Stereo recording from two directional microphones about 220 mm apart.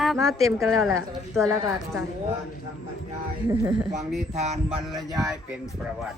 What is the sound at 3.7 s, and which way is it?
Speech, 25° right (ahead or behind).